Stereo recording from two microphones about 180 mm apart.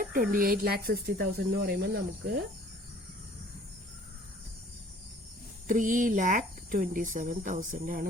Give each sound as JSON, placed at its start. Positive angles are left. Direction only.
{"t": 0.0, "sound": "speech", "side_deg": -50}
{"t": 5.6, "sound": "speech", "side_deg": -45}